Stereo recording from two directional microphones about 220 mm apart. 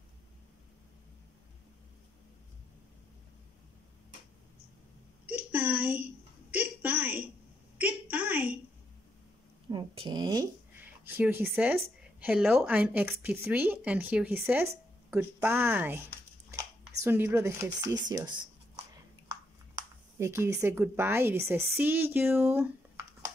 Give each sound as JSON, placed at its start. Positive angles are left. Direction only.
{"t": 5.2, "sound": "a sound", "side_deg": -5}
{"t": 9.7, "sound": "speech", "side_deg": -20}
{"t": 17.0, "sound": "speech", "side_deg": -10}
{"t": 19.7, "sound": "a woman's voice", "side_deg": -10}